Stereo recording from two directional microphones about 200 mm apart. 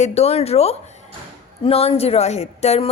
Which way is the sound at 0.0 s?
30° left (ahead or behind).